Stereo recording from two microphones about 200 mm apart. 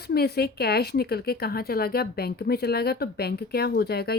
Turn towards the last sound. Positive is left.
turn(degrees=50)  # may be behind; listen again after turning